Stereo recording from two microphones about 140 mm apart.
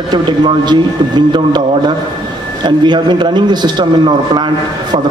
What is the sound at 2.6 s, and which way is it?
A man's voice, 30° right (ahead or behind).